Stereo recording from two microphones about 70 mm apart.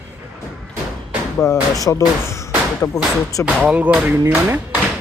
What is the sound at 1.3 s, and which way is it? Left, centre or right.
Speech, left.